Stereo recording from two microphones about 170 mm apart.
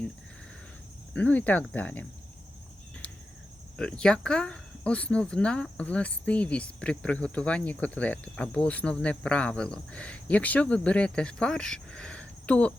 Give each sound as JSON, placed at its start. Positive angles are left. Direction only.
{"t": 1.1, "sound": "speech", "side_deg": 10}
{"t": 3.8, "sound": "speech", "side_deg": 5}